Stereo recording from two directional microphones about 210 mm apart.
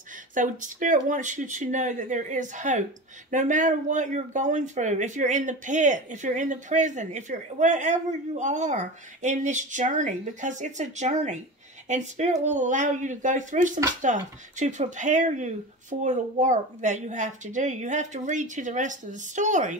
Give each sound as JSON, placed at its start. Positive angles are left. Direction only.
{"t": 0.3, "sound": "speech", "side_deg": -40}